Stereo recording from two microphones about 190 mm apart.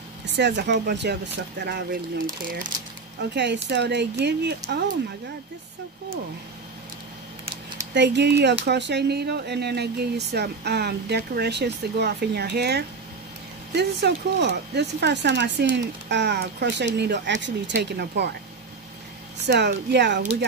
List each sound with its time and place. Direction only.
0.3 s speech: 65° right (ahead or behind); by 2.7 s 50° right (ahead or behind)
3.2 s speech: 65° right (ahead or behind)
7.9 s speech: 65° right (ahead or behind)
19.4 s speech: 60° right (ahead or behind)